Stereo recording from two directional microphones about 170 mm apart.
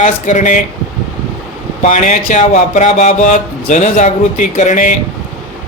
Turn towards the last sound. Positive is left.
turn(degrees=50)  # may be behind; listen again after turning